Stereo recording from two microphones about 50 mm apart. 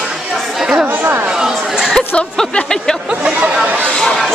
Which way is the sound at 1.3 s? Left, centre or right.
Centre.